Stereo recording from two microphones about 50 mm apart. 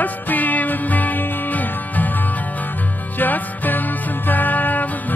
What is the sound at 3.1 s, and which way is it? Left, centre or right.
Music, left.